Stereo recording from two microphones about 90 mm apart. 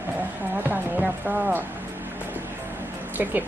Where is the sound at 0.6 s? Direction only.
20° right (ahead or behind).